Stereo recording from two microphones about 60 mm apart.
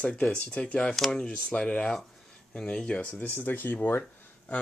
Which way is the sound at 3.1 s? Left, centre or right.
Left.